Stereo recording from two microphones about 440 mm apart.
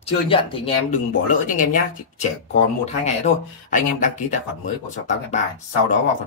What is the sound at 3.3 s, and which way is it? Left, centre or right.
Speech, centre.